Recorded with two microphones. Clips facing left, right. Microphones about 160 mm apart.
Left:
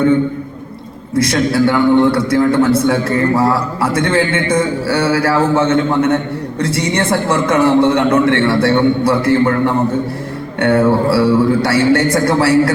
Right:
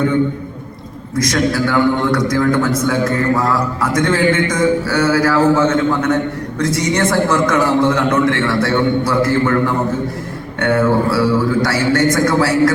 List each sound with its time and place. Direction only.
1.1 s a man's voice: 30° left (ahead or behind)